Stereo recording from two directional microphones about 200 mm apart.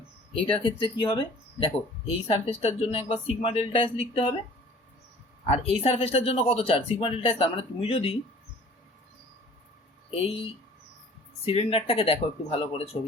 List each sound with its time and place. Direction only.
0.3 s a woman's voice: 25° left (ahead or behind)
5.5 s speech: 30° left (ahead or behind)
10.2 s speech: 30° left (ahead or behind)